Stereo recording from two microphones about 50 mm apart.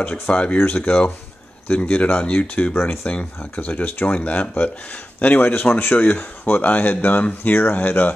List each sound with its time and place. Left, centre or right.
0.0 s speech: left
3.1 s speech: left